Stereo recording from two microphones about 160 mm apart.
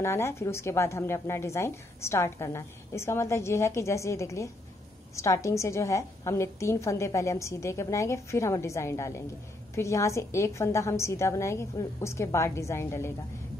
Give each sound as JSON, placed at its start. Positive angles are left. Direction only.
{"t": 0.0, "sound": "a woman's voice", "side_deg": 15}